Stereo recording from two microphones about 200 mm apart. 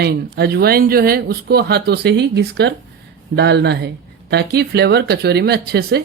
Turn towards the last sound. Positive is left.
turn(degrees=-55)  # may be behind; listen again after turning